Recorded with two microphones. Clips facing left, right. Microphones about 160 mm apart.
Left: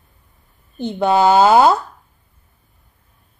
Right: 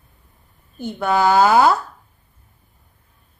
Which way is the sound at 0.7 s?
20° left (ahead or behind).